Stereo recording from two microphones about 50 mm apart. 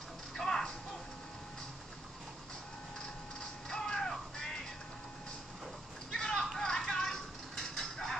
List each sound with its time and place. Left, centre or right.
0.3 s music: centre
3.6 s music: centre
6.1 s a sound: centre